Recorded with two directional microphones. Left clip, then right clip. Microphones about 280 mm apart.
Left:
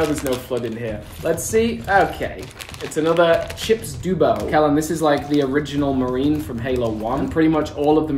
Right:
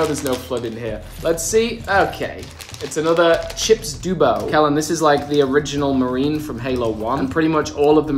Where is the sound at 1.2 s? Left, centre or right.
Centre.